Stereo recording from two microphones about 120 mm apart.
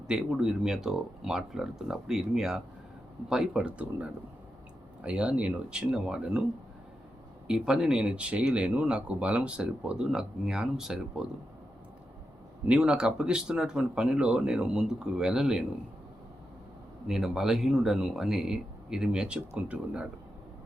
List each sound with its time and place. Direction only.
0.1 s speech: 5° right (ahead or behind)
7.4 s speech: 5° right (ahead or behind)
12.6 s speech: 10° right (ahead or behind)
17.1 s speech: 5° right (ahead or behind)